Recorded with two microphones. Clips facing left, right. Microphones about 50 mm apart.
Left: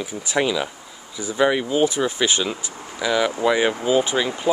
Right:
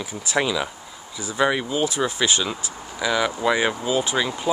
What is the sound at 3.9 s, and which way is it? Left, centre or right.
Speech, centre.